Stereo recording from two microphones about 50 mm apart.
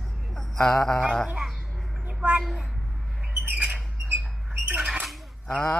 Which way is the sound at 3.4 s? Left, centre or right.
Right.